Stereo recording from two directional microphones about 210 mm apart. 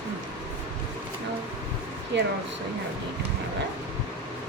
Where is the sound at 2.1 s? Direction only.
55° right (ahead or behind).